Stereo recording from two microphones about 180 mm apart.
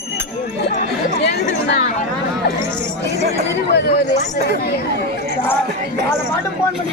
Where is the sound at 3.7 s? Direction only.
65° left (ahead or behind).